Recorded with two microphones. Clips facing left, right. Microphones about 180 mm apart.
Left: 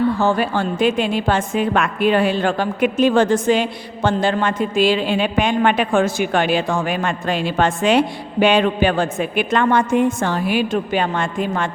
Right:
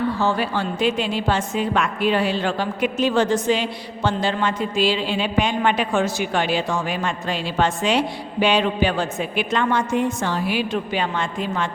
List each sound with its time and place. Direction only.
0.2 s a woman's voice: 50° left (ahead or behind)